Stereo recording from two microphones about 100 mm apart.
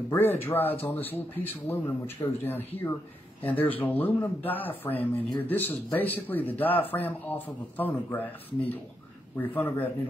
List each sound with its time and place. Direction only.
0.1 s speech: 20° left (ahead or behind)